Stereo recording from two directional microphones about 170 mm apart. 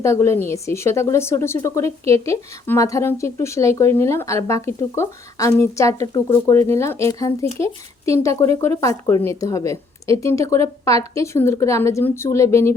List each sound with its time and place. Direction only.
0.0 s a woman's voice: 15° left (ahead or behind)